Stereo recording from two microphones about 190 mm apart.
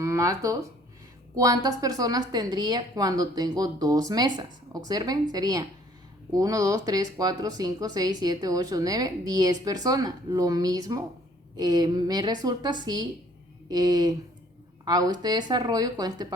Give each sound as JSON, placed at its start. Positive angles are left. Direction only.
{"t": 0.0, "sound": "speech", "side_deg": -15}